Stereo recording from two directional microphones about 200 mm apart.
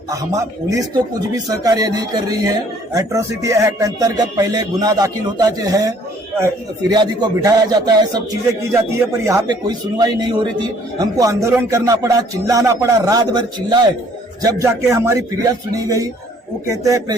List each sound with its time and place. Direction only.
0.1 s a man's voice: 15° right (ahead or behind)
6.9 s a man's voice: 20° right (ahead or behind)